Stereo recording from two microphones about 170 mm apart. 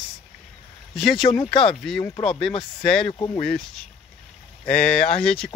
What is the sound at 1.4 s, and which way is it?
Speech, 30° left (ahead or behind).